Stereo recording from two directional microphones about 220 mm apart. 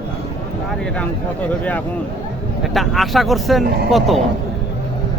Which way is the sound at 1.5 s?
5° left (ahead or behind).